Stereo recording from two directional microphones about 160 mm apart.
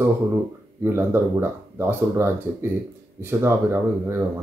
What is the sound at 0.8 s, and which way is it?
Speech, 15° right (ahead or behind).